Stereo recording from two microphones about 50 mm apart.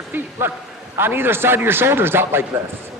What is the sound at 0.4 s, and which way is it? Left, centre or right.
A man's voice, right.